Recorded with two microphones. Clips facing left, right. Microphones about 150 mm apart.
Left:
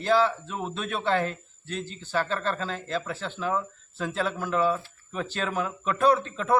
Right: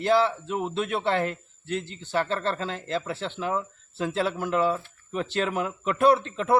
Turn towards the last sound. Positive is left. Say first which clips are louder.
# right 2 dB
turn(degrees=-20)  # may be behind; listen again after turning